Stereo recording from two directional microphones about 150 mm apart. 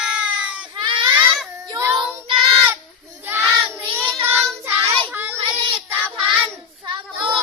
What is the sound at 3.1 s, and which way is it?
Child singing, 15° right (ahead or behind).